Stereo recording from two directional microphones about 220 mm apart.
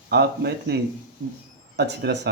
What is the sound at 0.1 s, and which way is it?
Speech, 50° right (ahead or behind).